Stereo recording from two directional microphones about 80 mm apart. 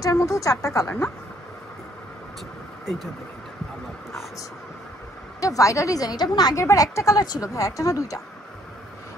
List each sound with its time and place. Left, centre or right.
0.0 s a woman's voice: left
5.4 s a woman's voice: left